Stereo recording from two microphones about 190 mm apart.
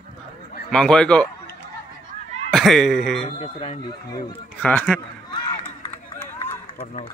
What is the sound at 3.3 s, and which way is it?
Speech, 30° left (ahead or behind).